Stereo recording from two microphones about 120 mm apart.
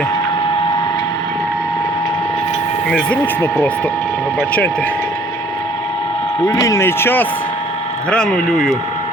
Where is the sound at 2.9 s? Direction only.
10° left (ahead or behind).